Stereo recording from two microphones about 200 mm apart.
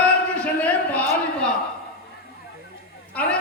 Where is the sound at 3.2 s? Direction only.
5° left (ahead or behind).